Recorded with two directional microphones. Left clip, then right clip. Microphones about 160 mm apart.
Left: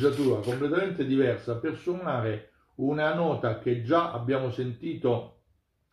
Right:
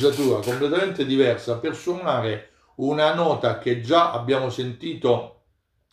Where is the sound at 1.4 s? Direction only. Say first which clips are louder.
Right 5 dB; centre (ahead or behind).